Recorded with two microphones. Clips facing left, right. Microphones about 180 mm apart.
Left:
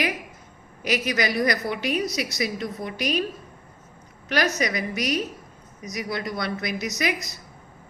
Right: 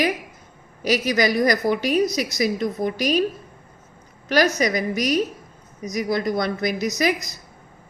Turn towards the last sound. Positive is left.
turn(degrees=-35)  # may be behind; listen again after turning